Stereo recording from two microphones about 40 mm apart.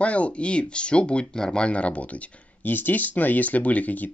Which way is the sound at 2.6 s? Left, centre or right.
Left.